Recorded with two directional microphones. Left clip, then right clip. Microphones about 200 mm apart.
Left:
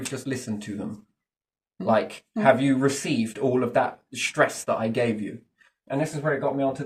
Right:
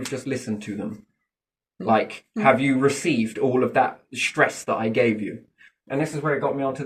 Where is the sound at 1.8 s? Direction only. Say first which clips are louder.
Right 2 dB; 25° left (ahead or behind).